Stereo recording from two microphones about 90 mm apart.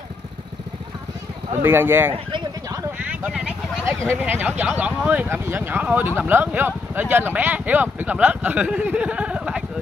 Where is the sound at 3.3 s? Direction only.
10° right (ahead or behind).